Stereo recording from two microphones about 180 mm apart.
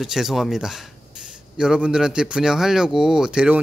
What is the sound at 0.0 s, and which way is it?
Speech, centre (ahead or behind).